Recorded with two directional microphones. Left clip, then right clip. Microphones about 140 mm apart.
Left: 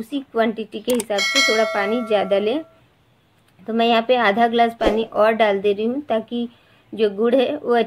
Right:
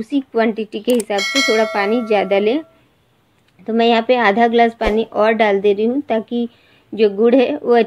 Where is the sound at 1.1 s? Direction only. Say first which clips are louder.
Left 1 dB; centre (ahead or behind).